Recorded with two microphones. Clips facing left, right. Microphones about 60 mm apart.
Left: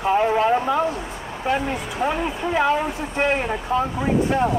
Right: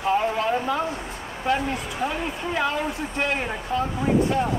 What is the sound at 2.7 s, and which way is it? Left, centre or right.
Speech, left.